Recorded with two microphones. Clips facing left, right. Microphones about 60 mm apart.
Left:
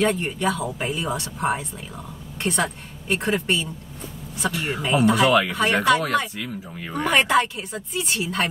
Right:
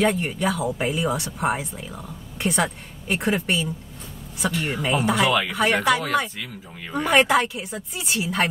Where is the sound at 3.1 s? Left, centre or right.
Centre.